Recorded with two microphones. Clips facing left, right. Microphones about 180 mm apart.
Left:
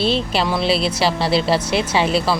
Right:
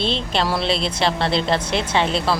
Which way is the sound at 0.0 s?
5° left (ahead or behind).